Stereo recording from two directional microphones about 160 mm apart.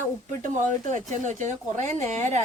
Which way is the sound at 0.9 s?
50° right (ahead or behind).